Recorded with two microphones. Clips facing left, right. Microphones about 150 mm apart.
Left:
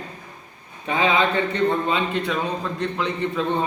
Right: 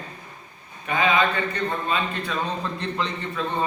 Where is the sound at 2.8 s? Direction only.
5° left (ahead or behind).